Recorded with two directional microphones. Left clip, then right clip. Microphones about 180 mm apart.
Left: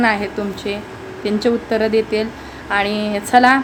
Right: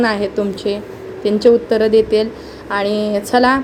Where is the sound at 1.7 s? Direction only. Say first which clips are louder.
Right 4 dB; 10° right (ahead or behind).